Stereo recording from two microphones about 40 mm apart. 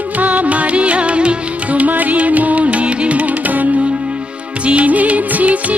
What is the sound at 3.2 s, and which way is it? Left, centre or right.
Music, right.